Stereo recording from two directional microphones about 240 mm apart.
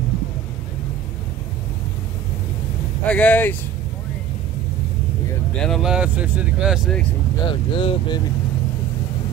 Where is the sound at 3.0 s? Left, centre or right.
Centre.